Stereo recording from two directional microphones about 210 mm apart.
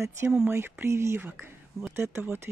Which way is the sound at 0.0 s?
5° right (ahead or behind).